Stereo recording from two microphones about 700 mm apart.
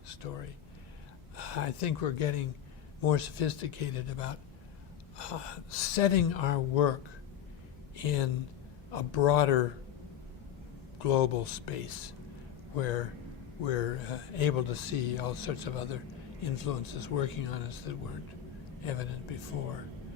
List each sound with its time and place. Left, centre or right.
0.2 s speech: left
7.9 s speech: left
11.0 s speech: left
12.7 s speech: left